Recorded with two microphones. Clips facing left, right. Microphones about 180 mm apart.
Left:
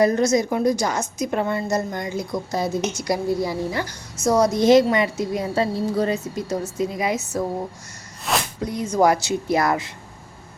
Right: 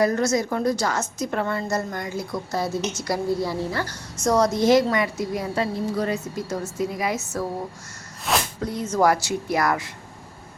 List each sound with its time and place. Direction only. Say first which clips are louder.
0.0 s a woman's voice: left 3 dB; 20° left (ahead or behind)
8.3 s a sound: even; centre (ahead or behind)
8.6 s a woman's voice: left 2 dB; 15° left (ahead or behind)